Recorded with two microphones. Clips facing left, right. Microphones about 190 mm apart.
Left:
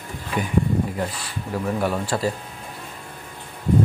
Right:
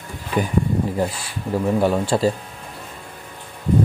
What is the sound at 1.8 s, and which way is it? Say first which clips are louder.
Speech: right 5 dB; 25° right (ahead or behind).